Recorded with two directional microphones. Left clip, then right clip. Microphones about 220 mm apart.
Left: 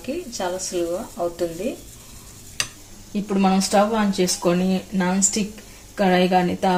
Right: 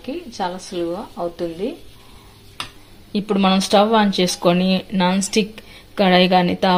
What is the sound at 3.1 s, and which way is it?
Speech, 35° right (ahead or behind).